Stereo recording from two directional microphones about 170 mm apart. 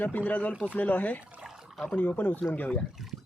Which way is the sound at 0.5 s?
5° right (ahead or behind).